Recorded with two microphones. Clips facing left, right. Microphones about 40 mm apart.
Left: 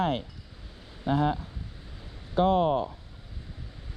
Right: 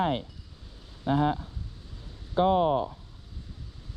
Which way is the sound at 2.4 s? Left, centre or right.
Centre.